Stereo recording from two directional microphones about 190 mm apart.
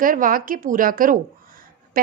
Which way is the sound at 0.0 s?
45° right (ahead or behind).